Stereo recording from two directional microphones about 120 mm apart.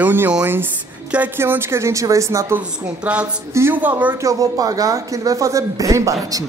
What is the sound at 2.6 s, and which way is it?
Speech, 10° right (ahead or behind).